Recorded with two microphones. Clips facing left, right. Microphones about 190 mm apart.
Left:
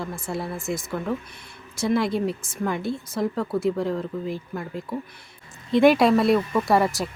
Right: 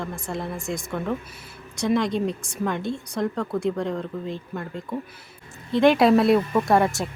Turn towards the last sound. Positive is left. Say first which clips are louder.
# right 1 dB
turn(degrees=0)  # may be behind; listen again after turning